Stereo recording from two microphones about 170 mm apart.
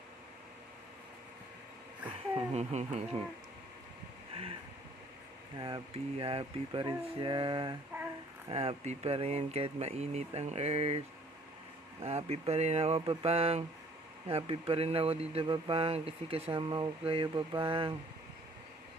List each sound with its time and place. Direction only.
2.5 s mantra: 40° right (ahead or behind)
5.5 s speech: 25° right (ahead or behind)
8.4 s mantra: 35° right (ahead or behind)
12.0 s mantra: 35° right (ahead or behind)